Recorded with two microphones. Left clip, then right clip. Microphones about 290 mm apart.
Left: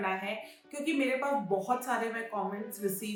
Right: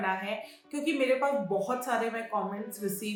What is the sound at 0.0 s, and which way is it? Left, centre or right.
A woman's voice, centre.